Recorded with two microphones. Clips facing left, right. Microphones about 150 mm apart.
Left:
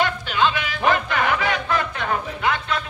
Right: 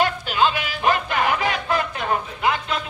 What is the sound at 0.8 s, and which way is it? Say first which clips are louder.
Music: even; 30° right (ahead or behind).